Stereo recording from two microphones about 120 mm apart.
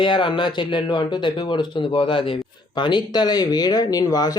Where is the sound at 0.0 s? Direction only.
40° left (ahead or behind).